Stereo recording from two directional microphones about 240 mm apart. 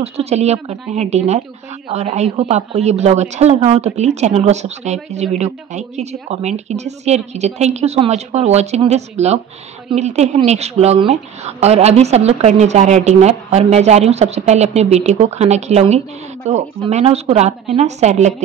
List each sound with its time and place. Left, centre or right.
0.0 s a woman's voice: right